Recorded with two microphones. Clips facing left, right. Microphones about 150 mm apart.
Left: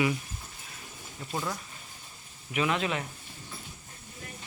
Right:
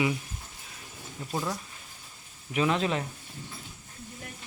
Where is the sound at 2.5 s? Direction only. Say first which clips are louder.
Right 2 dB; 35° right (ahead or behind).